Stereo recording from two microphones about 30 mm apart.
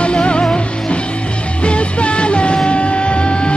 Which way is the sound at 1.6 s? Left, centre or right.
Left.